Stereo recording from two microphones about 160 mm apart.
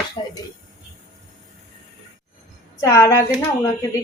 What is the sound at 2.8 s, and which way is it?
Speech, 20° left (ahead or behind).